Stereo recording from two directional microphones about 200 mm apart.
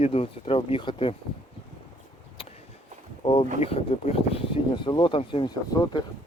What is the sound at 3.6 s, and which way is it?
Speech, 30° left (ahead or behind).